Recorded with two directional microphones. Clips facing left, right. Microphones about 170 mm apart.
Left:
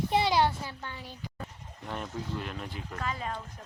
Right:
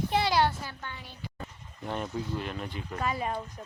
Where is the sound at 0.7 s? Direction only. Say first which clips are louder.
Left 1 dB; 30° left (ahead or behind).